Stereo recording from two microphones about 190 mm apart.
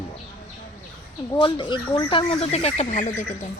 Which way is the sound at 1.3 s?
25° left (ahead or behind).